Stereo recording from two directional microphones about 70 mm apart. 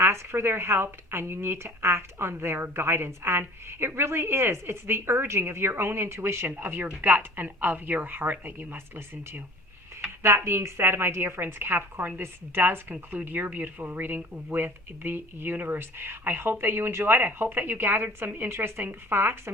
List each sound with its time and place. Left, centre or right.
0.0 s speech: right
10.2 s speech: right